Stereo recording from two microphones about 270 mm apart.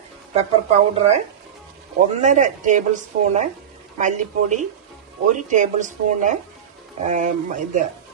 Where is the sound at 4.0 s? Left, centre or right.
Right.